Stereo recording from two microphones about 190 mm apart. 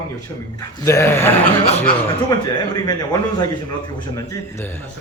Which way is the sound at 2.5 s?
20° left (ahead or behind).